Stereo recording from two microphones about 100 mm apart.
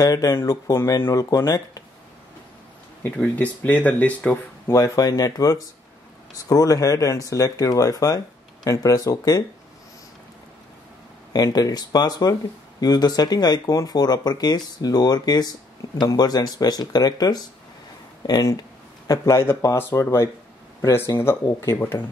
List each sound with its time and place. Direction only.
0.0 s speech: 35° left (ahead or behind)
3.0 s speech: 15° left (ahead or behind)
4.7 s speech: 35° left (ahead or behind)
11.3 s speech: 40° left (ahead or behind)